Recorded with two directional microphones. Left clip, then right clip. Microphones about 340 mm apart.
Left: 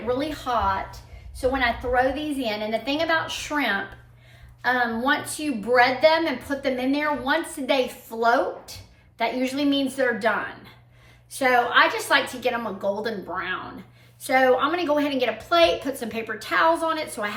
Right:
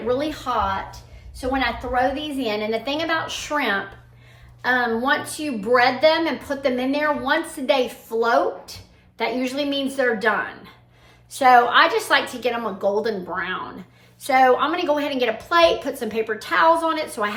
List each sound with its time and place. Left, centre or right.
0.1 s a woman's voice: centre
1.5 s a woman's voice: centre